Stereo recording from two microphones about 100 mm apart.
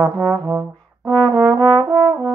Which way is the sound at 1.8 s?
40° right (ahead or behind).